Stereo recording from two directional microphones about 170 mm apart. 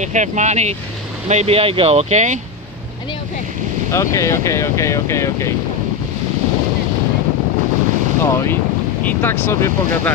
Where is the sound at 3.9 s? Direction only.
15° left (ahead or behind).